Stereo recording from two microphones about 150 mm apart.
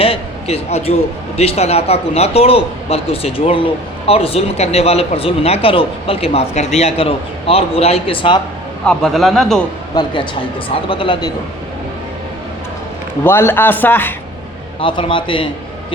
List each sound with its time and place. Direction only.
0.0 s a man's voice: 40° left (ahead or behind)
8.8 s speech: centre (ahead or behind)
9.9 s speech: 30° left (ahead or behind)
13.2 s a man's voice: 15° left (ahead or behind)
14.8 s speech: 35° left (ahead or behind)